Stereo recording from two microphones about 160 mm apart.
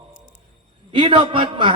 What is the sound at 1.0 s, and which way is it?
Speech, 35° right (ahead or behind).